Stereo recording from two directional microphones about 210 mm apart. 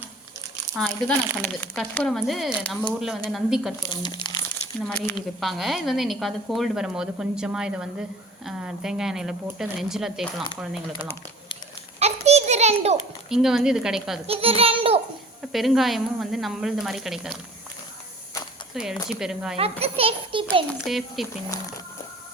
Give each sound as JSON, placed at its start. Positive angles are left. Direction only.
{"t": 0.8, "sound": "a woman's voice", "side_deg": 0}
{"t": 4.1, "sound": "crumpling", "side_deg": 20}
{"t": 4.9, "sound": "a woman's voice", "side_deg": 5}
{"t": 11.9, "sound": "a sound", "side_deg": -30}
{"t": 13.3, "sound": "a woman's voice", "side_deg": 0}
{"t": 14.3, "sound": "a child's voice", "side_deg": -25}
{"t": 15.5, "sound": "a woman's voice", "side_deg": 0}
{"t": 18.7, "sound": "a woman's voice", "side_deg": 0}
{"t": 19.8, "sound": "a child's voice", "side_deg": -25}
{"t": 20.8, "sound": "a woman's voice", "side_deg": 0}